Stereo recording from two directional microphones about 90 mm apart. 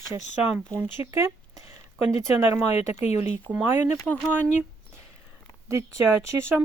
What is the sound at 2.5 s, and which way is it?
Speech, 25° right (ahead or behind).